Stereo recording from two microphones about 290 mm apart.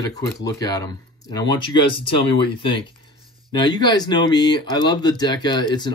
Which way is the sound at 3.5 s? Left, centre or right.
Centre.